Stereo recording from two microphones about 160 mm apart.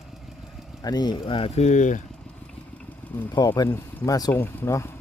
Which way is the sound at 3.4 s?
25° left (ahead or behind).